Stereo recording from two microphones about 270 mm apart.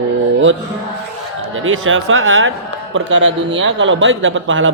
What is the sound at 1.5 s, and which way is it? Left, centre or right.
Speech, right.